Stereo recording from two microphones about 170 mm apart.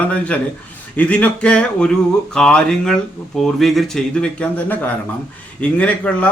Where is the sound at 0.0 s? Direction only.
10° left (ahead or behind).